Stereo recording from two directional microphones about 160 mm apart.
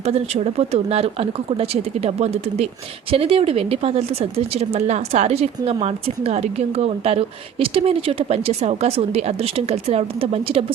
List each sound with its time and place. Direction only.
0.0 s a woman's voice: 40° right (ahead or behind)